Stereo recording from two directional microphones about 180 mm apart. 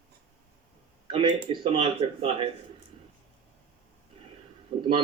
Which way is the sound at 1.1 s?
25° right (ahead or behind).